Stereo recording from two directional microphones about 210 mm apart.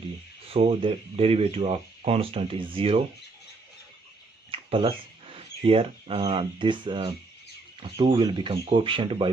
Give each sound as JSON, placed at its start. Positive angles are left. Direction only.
{"t": 0.5, "sound": "speech", "side_deg": -30}
{"t": 4.5, "sound": "speech", "side_deg": -25}